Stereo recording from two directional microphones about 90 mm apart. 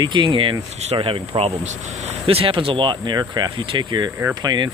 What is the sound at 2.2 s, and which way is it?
Speech, 90° right.